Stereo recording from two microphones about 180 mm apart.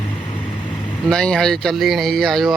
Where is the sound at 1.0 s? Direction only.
5° left (ahead or behind).